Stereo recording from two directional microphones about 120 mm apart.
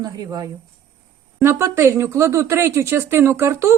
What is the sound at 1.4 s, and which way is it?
Speech, 20° right (ahead or behind).